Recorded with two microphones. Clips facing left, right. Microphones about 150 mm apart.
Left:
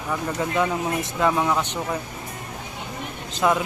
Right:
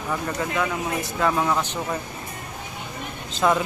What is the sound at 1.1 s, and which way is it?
Speech, 10° left (ahead or behind).